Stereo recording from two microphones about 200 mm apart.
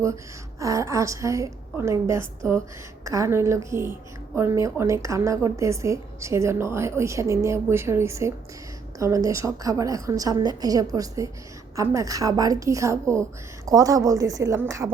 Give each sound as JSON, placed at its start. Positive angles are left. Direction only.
{"t": 0.6, "sound": "a woman's voice", "side_deg": -15}